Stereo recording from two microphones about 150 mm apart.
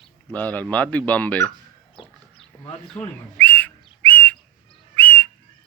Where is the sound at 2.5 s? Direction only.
15° left (ahead or behind).